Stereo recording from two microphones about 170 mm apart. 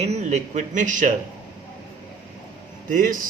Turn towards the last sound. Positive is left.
turn(degrees=-50)  # may be behind; listen again after turning